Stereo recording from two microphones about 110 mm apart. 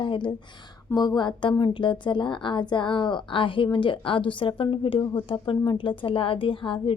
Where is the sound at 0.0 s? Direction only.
45° left (ahead or behind).